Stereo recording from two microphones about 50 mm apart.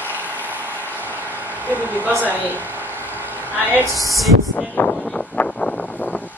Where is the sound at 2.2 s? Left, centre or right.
Right.